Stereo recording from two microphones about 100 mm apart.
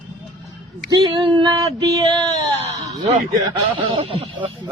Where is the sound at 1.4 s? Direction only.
45° right (ahead or behind).